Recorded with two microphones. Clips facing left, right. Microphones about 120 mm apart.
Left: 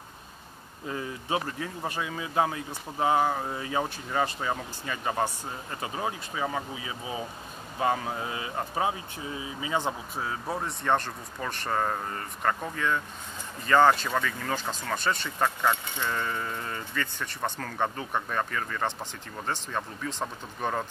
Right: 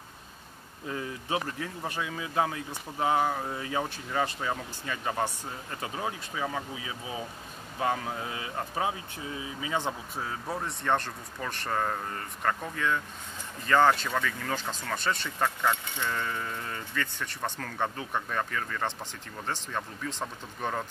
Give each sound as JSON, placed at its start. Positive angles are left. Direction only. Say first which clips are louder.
{"t": 0.8, "sound": "speech", "louder": "left 1 dB", "side_deg": 25}